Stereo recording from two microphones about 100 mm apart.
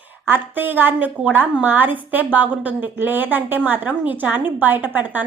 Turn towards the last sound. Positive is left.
turn(degrees=-15)  # may be behind; listen again after turning